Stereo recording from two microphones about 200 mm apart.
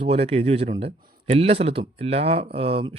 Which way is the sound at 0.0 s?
30° right (ahead or behind).